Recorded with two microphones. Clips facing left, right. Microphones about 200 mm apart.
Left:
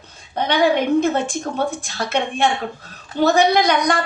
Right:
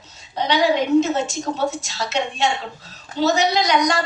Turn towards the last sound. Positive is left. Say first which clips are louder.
# left 2 dB
turn(degrees=55)  # may be behind; listen again after turning